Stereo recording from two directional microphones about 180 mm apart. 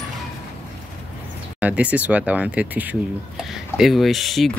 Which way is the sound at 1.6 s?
10° right (ahead or behind).